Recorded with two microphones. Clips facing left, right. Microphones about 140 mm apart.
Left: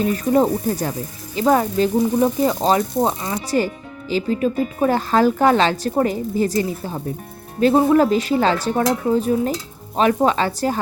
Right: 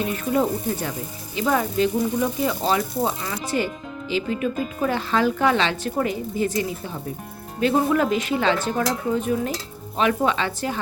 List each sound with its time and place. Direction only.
0.0 s a woman's voice: 40° left (ahead or behind)